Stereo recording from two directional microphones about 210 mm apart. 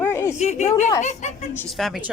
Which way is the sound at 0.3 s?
35° left (ahead or behind).